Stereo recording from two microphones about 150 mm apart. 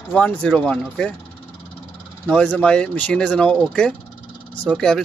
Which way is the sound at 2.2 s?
5° left (ahead or behind).